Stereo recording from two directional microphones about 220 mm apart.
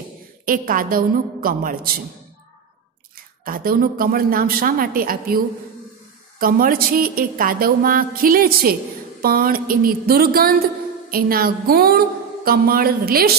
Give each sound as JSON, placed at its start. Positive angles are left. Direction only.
{"t": 0.5, "sound": "a woman's voice", "side_deg": -40}
{"t": 3.4, "sound": "a woman's voice", "side_deg": -40}
{"t": 6.4, "sound": "a woman's voice", "side_deg": -40}